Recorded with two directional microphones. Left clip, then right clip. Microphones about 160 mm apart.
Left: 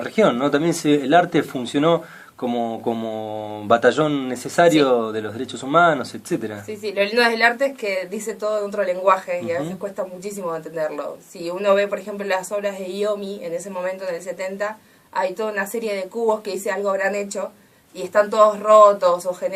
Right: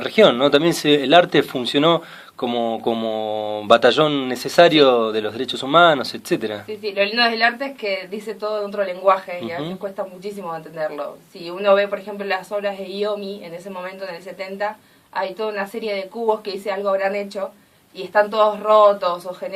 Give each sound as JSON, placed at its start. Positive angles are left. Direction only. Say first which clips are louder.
{"t": 0.0, "sound": "speech", "louder": "right 4 dB", "side_deg": -45}
{"t": 6.7, "sound": "speech", "louder": "even", "side_deg": 5}